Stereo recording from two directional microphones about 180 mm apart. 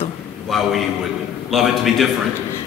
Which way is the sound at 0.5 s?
Centre (ahead or behind).